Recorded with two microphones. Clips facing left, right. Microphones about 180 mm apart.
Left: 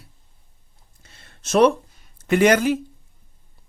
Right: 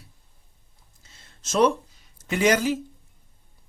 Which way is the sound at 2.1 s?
60° left (ahead or behind).